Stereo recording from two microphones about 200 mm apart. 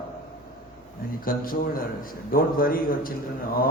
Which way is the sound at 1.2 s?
45° left (ahead or behind).